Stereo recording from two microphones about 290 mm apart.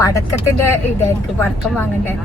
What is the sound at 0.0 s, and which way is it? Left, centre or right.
Speech, centre.